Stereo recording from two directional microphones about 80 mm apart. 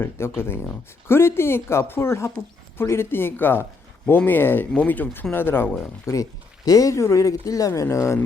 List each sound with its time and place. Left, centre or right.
0.0 s speech: left
6.1 s speech: left